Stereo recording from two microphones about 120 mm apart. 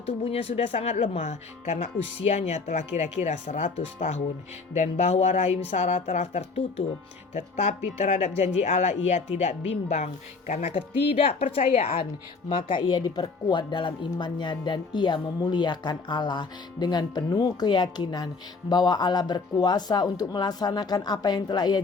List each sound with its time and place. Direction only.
0.0 s a woman's voice: 55° left (ahead or behind)
7.3 s speech: 75° left (ahead or behind); by 11.9 s 60° left (ahead or behind)
12.5 s speech: 45° left (ahead or behind)